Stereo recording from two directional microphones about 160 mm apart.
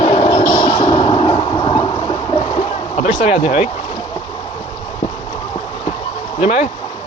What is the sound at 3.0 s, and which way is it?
Speech, 45° left (ahead or behind).